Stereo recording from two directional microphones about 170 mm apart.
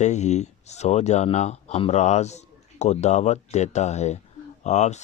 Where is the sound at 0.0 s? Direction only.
45° left (ahead or behind).